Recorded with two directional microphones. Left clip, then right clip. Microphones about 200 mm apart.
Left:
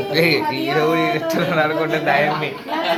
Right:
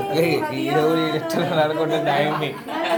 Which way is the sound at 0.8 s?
10° right (ahead or behind).